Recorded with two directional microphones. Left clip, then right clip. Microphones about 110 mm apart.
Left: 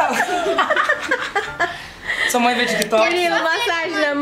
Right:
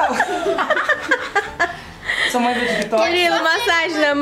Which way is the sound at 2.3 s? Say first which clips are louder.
Left 1 dB; 25° left (ahead or behind).